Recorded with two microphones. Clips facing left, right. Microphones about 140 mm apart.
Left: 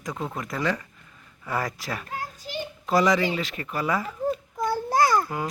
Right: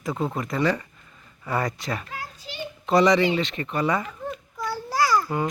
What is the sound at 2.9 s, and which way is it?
Speech, centre (ahead or behind).